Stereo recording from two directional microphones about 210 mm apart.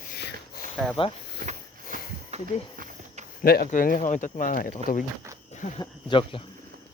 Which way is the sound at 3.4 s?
45° left (ahead or behind).